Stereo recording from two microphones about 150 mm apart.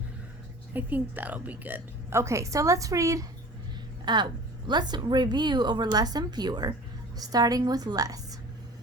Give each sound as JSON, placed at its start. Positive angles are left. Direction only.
{"t": 0.7, "sound": "a woman's voice", "side_deg": -10}